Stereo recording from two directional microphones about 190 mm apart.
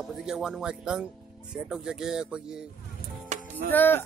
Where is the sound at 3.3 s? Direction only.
40° right (ahead or behind).